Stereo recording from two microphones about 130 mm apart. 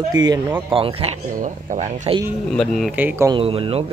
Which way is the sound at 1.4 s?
75° right (ahead or behind).